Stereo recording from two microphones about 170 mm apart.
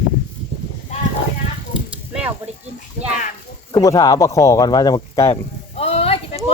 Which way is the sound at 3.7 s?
20° left (ahead or behind).